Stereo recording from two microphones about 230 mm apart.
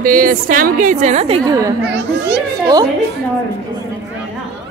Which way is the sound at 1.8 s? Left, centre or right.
Right.